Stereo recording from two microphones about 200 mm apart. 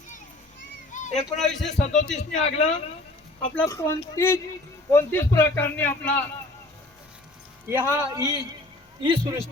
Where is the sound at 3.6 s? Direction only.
15° left (ahead or behind).